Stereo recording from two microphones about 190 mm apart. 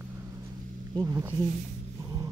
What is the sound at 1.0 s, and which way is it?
Speech, 15° right (ahead or behind).